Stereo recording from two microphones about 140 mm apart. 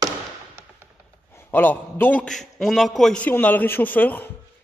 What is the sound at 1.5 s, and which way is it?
A man's voice, 15° left (ahead or behind).